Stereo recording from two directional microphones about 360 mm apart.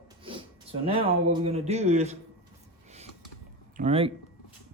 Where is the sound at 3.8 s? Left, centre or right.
Centre.